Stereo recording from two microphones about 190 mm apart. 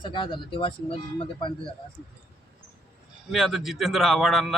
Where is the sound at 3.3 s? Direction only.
Centre (ahead or behind).